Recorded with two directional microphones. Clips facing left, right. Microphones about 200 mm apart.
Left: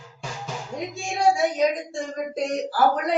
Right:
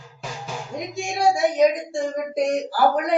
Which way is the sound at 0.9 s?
15° right (ahead or behind).